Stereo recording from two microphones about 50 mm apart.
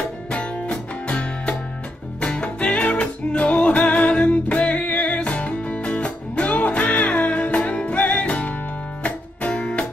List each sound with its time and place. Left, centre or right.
0.3 s music: left